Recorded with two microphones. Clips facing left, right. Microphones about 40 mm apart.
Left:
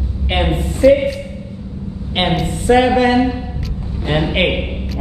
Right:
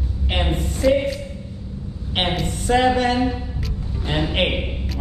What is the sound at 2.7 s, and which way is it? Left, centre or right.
Music, centre.